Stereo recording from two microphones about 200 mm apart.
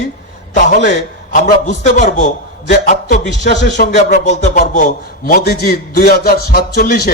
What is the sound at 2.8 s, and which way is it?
Music, 40° left (ahead or behind).